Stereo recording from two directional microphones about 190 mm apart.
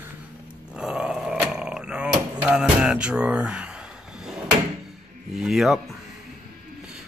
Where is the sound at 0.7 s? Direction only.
5° right (ahead or behind).